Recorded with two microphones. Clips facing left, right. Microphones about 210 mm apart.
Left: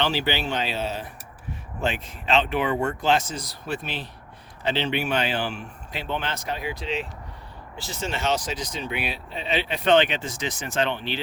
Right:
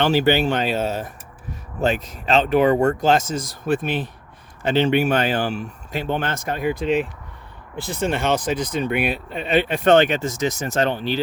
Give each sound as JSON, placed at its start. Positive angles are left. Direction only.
{"t": 0.0, "sound": "speech", "side_deg": -50}